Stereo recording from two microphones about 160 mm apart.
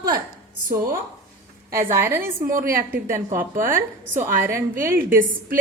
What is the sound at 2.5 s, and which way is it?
Speech, 60° right (ahead or behind).